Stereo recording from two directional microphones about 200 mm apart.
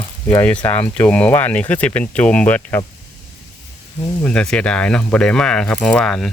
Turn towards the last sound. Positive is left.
turn(degrees=5)  # may be behind; listen again after turning